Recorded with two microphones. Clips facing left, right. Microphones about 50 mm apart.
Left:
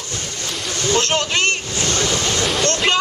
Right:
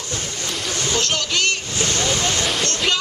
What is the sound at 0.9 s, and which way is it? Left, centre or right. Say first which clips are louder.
Vehicle: left 4 dB; left.